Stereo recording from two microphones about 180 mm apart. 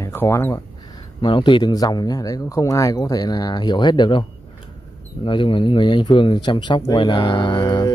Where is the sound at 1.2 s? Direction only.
25° left (ahead or behind).